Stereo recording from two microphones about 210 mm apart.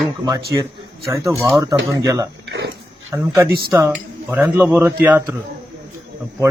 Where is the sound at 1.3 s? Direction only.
Centre (ahead or behind).